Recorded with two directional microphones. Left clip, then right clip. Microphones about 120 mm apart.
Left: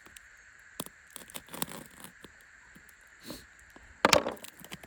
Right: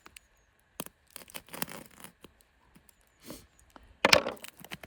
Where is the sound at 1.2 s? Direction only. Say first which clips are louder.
Even; 10° left (ahead or behind).